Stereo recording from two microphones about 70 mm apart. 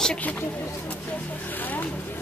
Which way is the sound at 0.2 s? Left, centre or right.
Left.